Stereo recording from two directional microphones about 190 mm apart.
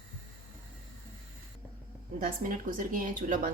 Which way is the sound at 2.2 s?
45° right (ahead or behind).